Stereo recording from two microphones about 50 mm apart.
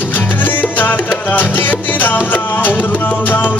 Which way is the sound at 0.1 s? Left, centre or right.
Left.